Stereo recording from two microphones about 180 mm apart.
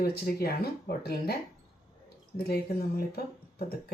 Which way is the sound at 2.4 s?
60° left (ahead or behind).